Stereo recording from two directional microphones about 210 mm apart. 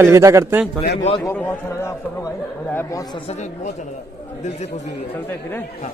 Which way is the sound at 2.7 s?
10° left (ahead or behind).